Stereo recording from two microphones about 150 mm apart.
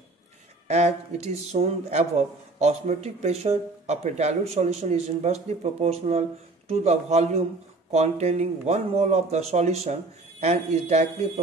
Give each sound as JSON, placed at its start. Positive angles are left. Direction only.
{"t": 0.7, "sound": "speech", "side_deg": -45}